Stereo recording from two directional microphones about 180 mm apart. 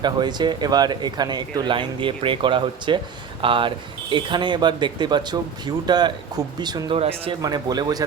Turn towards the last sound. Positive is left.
turn(degrees=-20)  # may be behind; listen again after turning